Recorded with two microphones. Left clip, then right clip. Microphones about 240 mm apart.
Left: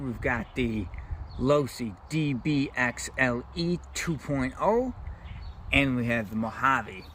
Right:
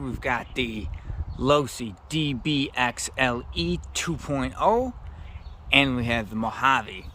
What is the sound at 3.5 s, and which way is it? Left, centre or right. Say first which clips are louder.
Speech: right 3 dB; right.